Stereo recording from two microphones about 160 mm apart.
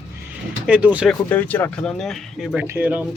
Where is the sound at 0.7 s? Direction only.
10° right (ahead or behind).